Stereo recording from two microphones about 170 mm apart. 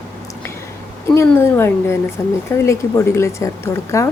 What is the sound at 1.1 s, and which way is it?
Speech, 15° left (ahead or behind).